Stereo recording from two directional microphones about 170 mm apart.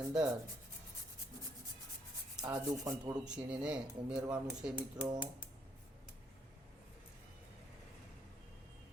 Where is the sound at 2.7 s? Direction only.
20° right (ahead or behind).